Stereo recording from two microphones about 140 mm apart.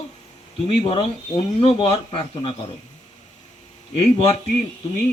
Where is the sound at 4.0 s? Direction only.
45° left (ahead or behind).